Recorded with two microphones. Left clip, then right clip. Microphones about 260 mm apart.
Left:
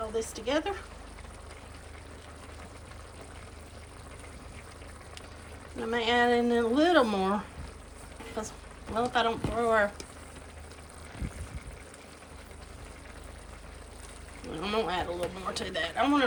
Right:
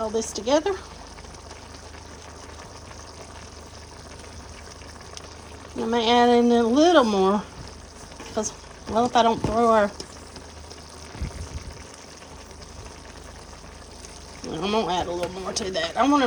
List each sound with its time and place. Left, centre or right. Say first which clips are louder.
0.2 s speech: right 8 dB; centre
5.8 s speech: right 7 dB; centre
8.4 s a sound: right 10 dB; centre
9.1 s speech: right 9 dB; centre
14.4 s speech: right 6 dB; centre